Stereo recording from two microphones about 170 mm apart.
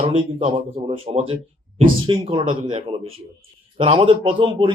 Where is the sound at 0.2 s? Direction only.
30° right (ahead or behind).